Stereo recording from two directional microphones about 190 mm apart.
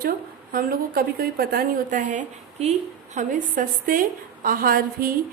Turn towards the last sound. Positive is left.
turn(degrees=-50)  # may be behind; listen again after turning